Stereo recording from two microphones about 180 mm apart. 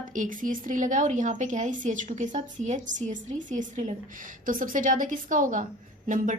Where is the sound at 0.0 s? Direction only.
45° right (ahead or behind).